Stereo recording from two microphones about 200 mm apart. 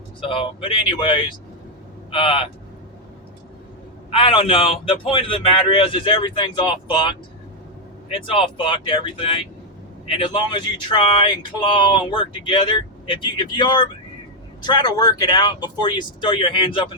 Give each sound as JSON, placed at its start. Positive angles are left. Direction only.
{"t": 0.2, "sound": "speech", "side_deg": 25}
{"t": 4.2, "sound": "speech", "side_deg": 25}
{"t": 8.4, "sound": "speech", "side_deg": 25}